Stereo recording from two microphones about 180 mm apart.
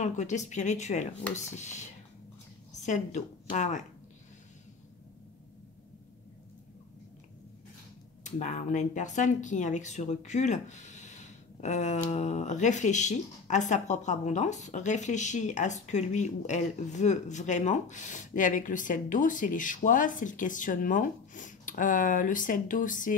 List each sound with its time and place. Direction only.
0.0 s speech: 40° left (ahead or behind)
8.2 s speech: 40° left (ahead or behind)